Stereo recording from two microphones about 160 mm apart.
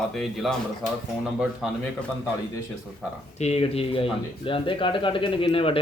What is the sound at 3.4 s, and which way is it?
Speech, 40° left (ahead or behind).